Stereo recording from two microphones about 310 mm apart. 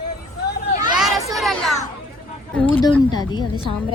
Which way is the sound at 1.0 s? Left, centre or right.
Centre.